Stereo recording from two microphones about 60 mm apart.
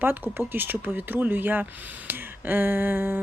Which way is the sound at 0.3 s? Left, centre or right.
Right.